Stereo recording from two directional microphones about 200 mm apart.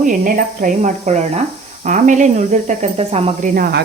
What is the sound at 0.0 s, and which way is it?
Speech, 40° right (ahead or behind).